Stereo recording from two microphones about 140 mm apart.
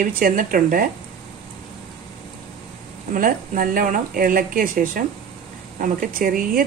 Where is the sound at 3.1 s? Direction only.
80° right.